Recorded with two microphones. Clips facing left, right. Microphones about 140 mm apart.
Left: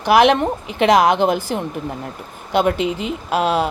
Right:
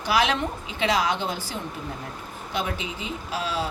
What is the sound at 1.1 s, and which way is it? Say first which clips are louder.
Speech: left 12 dB; 80° left.